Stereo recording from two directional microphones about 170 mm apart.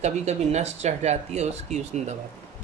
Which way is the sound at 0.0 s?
40° right (ahead or behind).